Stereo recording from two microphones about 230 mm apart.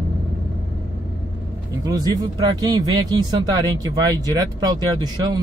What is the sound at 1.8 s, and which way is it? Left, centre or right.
A man's voice, centre.